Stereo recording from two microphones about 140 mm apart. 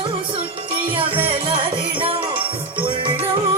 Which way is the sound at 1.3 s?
40° right (ahead or behind).